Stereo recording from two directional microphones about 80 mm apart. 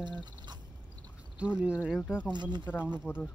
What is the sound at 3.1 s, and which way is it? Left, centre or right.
Speech, left.